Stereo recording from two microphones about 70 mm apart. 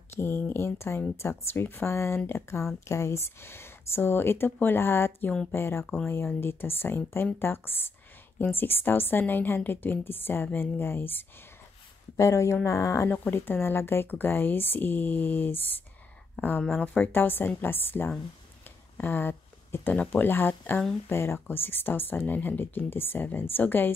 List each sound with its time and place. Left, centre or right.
0.1 s speech: left
12.2 s speech: left
13.1 s speech: left